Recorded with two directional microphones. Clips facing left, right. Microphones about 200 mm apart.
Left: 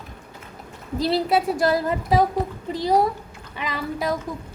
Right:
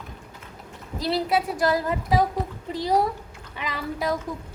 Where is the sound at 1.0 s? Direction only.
30° left (ahead or behind).